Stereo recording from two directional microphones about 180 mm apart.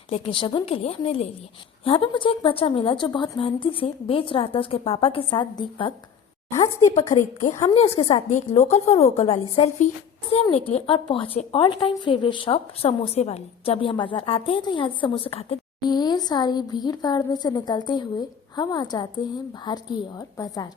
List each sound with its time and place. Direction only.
0.1 s a woman's voice: 30° left (ahead or behind)
7.5 s a woman's voice: 35° left (ahead or behind)